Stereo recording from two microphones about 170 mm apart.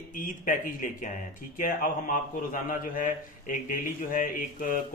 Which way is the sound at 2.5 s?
50° left (ahead or behind).